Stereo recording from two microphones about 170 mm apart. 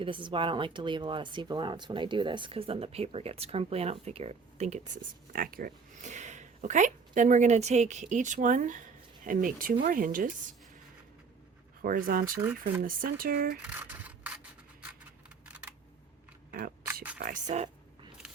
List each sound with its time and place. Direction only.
0.0 s speech: 30° right (ahead or behind)
5.3 s speech: 60° right (ahead or behind)
11.8 s speech: 55° right (ahead or behind)
13.7 s rub: 10° right (ahead or behind)
15.4 s computer keyboard: 10° right (ahead or behind)
16.5 s a sound: 60° right (ahead or behind)
16.8 s a sound: 15° right (ahead or behind)
17.2 s speech: 50° right (ahead or behind)